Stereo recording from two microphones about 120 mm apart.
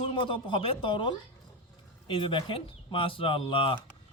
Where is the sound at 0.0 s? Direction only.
45° left (ahead or behind).